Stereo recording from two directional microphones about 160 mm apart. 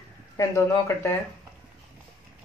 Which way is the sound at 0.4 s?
15° left (ahead or behind).